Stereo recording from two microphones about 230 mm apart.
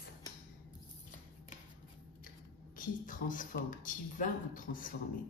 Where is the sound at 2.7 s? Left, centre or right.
Left.